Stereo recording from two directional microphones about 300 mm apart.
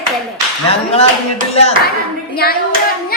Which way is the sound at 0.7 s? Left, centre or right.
Centre.